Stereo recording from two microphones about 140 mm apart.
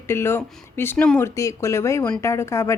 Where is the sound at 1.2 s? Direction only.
20° left (ahead or behind).